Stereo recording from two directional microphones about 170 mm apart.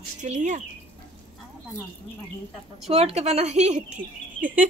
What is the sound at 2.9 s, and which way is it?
Speech, 35° right (ahead or behind).